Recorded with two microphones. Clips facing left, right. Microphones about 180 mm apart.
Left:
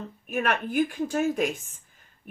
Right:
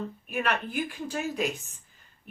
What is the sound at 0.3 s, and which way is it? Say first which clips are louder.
Speech: left 3 dB; 45° left (ahead or behind).